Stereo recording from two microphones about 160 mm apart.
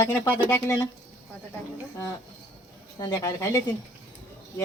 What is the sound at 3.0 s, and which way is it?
Speech, 20° left (ahead or behind).